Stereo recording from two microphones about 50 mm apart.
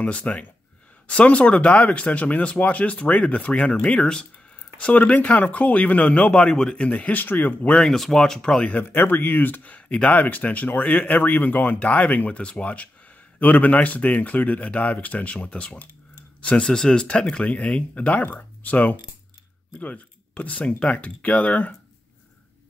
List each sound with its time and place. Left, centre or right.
0.0 s speech: left
6.9 s speech: left
7.8 s speech: centre
8.8 s speech: left
12.4 s speech: left
16.3 s a sound: left
16.6 s speech: centre; by 21.7 s left